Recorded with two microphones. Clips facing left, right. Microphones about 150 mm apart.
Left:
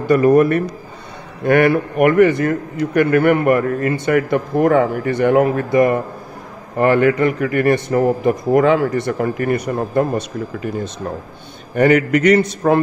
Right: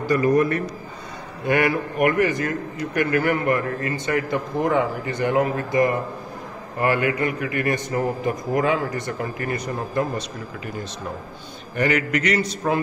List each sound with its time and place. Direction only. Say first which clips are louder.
0.0 s a man's voice: left 7 dB; 60° left (ahead or behind)
6.8 s a man's voice: left 8 dB; 45° left (ahead or behind)
7.6 s a man's voice: left 9 dB; 65° left (ahead or behind)